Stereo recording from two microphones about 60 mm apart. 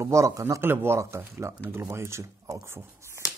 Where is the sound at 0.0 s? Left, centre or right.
Right.